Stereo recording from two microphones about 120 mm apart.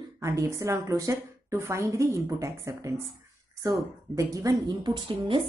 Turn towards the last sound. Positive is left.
turn(degrees=-40)  # may be behind; listen again after turning